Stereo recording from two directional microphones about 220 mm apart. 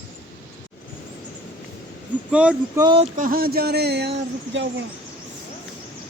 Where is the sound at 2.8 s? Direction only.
25° right (ahead or behind).